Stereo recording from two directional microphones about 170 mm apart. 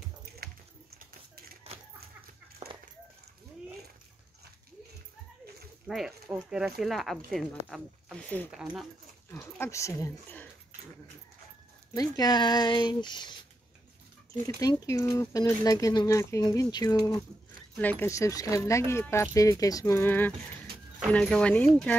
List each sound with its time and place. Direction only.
0.2 s a sound: 65° right (ahead or behind)
2.6 s a sound: 30° right (ahead or behind)
5.9 s speech: centre (ahead or behind)
8.5 s speech: centre (ahead or behind)
9.3 s speech: 15° left (ahead or behind)
11.9 s speech: 20° left (ahead or behind)
14.6 s speech: 20° left (ahead or behind)
17.7 s speech: 10° left (ahead or behind)